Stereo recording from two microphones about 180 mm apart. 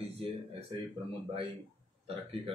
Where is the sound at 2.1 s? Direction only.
30° right (ahead or behind).